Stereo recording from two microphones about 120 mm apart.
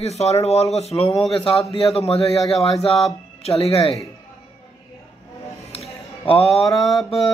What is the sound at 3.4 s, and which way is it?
Speech, 55° left (ahead or behind).